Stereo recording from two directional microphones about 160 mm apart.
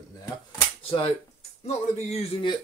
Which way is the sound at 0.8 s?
35° left (ahead or behind).